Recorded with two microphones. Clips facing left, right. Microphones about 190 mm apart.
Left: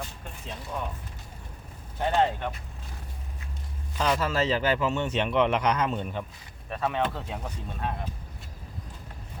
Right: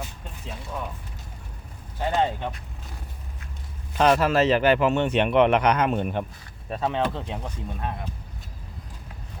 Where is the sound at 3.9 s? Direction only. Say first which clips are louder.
Right 7 dB; 65° right (ahead or behind).